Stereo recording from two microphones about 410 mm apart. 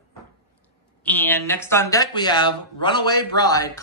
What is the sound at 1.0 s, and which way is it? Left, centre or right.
Speech, centre.